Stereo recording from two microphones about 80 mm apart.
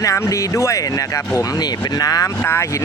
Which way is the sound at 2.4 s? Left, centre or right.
Left.